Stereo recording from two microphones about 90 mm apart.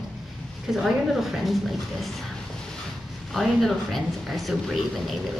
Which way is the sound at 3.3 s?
Centre (ahead or behind).